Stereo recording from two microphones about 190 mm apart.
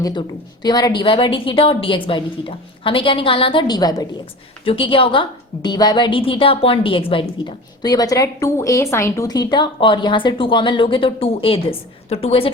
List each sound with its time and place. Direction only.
0.0 s a woman's voice: 25° left (ahead or behind)